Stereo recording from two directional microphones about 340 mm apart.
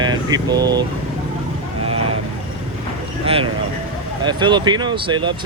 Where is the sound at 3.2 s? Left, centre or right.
Centre.